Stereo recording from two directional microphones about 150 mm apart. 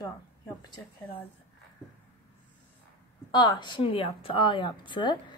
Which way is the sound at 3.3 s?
30° left (ahead or behind).